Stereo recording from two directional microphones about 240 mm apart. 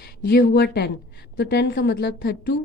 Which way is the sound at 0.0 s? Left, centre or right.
Left.